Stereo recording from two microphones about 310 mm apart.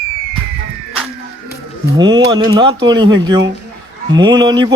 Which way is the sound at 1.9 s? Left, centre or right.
Centre.